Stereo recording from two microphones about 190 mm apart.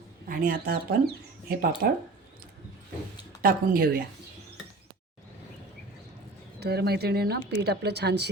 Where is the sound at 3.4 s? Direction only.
50° right (ahead or behind).